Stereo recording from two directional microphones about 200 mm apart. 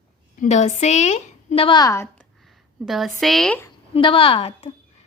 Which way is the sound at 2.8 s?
Centre (ahead or behind).